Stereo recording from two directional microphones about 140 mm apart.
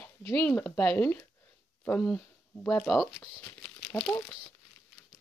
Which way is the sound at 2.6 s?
5° left (ahead or behind).